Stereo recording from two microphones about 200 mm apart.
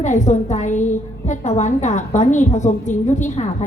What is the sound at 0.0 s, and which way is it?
A woman's voice, 35° left (ahead or behind).